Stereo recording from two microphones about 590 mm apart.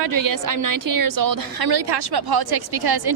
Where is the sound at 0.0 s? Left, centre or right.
Right.